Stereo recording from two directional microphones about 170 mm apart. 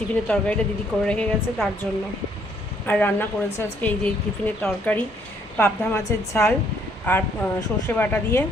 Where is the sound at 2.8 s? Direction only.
10° left (ahead or behind).